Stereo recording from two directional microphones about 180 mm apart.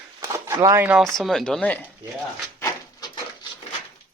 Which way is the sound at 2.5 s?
20° left (ahead or behind).